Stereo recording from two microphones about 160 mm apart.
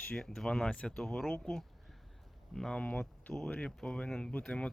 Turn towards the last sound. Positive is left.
turn(degrees=5)  # may be behind; listen again after turning